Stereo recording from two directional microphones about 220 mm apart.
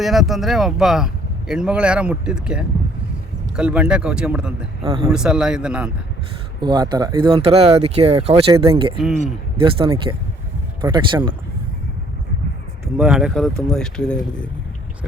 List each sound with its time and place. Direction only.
0.0 s speech: centre (ahead or behind)
4.8 s a man's voice: 15° right (ahead or behind)
5.0 s speech: 5° right (ahead or behind)
6.6 s speech: 20° right (ahead or behind)
13.0 s speech: 5° right (ahead or behind)